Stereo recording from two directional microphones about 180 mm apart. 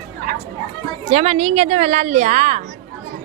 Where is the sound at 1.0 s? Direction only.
35° right (ahead or behind).